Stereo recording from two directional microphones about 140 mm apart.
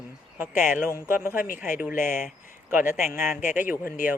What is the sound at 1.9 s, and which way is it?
Speech, 65° left (ahead or behind).